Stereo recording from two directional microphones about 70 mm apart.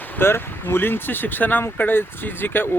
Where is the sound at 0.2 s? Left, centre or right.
Left.